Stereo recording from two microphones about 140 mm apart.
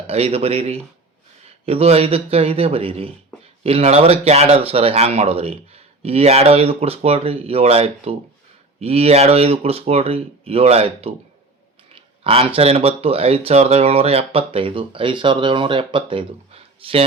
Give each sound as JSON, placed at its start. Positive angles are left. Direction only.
{"t": 0.1, "sound": "speech", "side_deg": -45}